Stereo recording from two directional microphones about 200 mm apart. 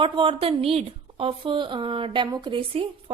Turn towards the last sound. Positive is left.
turn(degrees=-25)  # may be behind; listen again after turning